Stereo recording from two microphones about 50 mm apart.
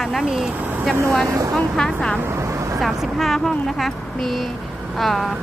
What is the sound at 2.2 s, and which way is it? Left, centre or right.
Vehicle, right.